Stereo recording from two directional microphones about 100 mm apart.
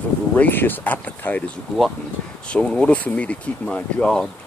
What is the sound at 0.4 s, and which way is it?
Speech, 20° left (ahead or behind).